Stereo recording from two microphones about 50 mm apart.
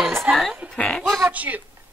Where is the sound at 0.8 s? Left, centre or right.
Centre.